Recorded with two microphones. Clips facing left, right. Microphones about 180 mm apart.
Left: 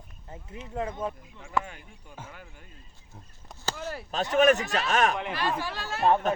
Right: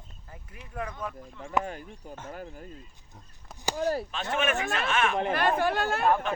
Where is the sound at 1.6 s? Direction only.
40° right (ahead or behind).